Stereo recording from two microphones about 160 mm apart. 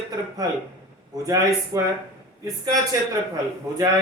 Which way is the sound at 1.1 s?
20° right (ahead or behind).